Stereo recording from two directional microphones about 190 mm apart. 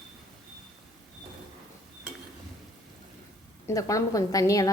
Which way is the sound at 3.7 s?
15° left (ahead or behind).